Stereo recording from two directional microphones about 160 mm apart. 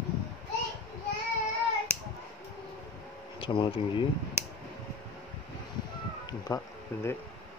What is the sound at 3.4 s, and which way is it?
Speech, 35° left (ahead or behind).